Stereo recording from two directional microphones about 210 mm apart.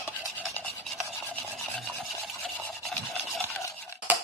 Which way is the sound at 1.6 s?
Centre (ahead or behind).